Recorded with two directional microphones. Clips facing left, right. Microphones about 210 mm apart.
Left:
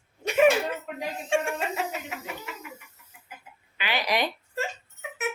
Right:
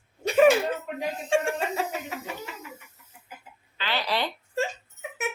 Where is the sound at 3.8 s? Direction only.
15° left (ahead or behind).